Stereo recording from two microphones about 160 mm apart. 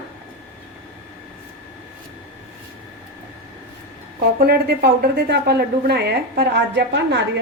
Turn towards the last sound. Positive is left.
turn(degrees=-90)